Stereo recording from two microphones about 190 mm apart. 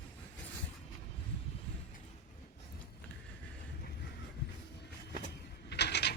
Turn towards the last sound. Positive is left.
turn(degrees=60)  # may be behind; listen again after turning